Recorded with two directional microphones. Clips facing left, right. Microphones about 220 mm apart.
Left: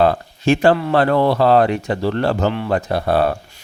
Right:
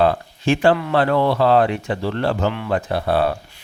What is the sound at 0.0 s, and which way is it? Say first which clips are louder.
Speech: left 2 dB; 40° left (ahead or behind).